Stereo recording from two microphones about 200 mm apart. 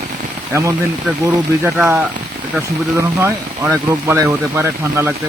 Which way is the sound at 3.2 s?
10° right (ahead or behind).